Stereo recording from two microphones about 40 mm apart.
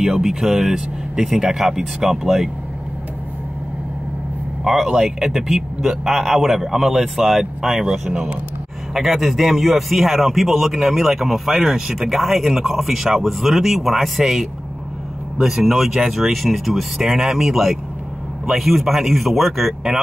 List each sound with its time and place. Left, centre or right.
0.0 s speech: centre
4.8 s speech: centre
7.7 s speech: centre